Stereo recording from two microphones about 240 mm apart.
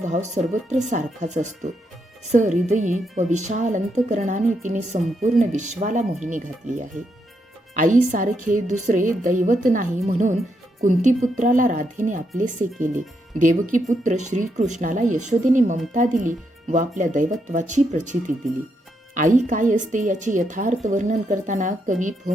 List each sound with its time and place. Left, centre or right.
0.0 s speech: right
13.4 s speech: right